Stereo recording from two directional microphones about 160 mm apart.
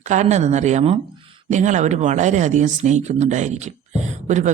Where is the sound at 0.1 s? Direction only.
45° right (ahead or behind).